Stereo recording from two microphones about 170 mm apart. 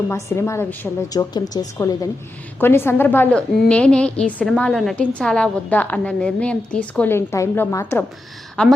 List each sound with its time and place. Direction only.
0.1 s a woman's voice: 15° left (ahead or behind)
8.6 s speech: 5° left (ahead or behind)